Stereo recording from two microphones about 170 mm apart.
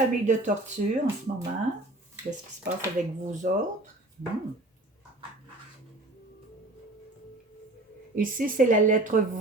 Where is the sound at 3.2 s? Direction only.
45° right (ahead or behind).